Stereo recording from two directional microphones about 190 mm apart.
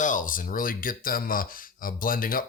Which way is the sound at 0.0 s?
45° left (ahead or behind).